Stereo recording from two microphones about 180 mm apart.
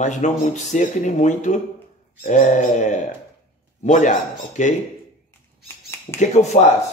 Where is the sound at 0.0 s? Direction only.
40° left (ahead or behind).